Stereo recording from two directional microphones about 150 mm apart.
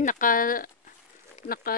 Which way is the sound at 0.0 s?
65° left (ahead or behind).